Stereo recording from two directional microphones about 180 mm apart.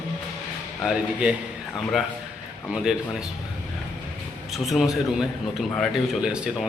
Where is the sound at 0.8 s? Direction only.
5° right (ahead or behind).